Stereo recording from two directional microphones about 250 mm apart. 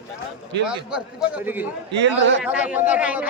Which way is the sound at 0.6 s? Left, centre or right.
Centre.